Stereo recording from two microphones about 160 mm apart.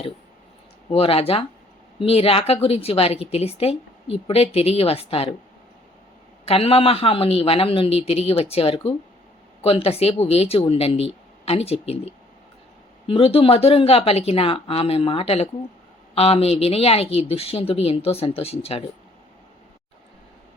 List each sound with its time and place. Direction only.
0.9 s a woman's voice: 35° left (ahead or behind)
6.4 s a woman's voice: 40° left (ahead or behind)